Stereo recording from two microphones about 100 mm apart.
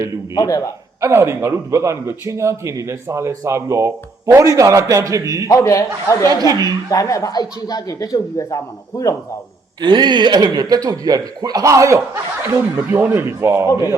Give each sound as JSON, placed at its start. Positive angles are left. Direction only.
{"t": 0.3, "sound": "speech", "side_deg": 35}
{"t": 1.0, "sound": "a man's voice", "side_deg": -25}
{"t": 5.5, "sound": "speech", "side_deg": 35}
{"t": 6.2, "sound": "a man's voice", "side_deg": -40}
{"t": 6.9, "sound": "speech", "side_deg": 35}
{"t": 9.8, "sound": "speech", "side_deg": -50}